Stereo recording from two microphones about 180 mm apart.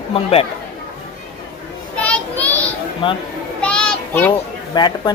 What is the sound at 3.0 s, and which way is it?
Speech, 25° left (ahead or behind).